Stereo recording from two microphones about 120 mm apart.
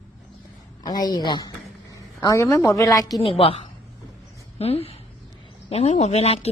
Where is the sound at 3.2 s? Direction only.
50° left (ahead or behind).